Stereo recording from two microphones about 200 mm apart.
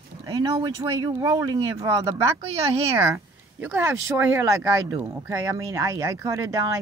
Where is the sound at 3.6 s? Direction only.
10° right (ahead or behind).